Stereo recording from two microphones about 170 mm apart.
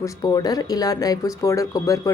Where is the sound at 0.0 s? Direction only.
20° left (ahead or behind).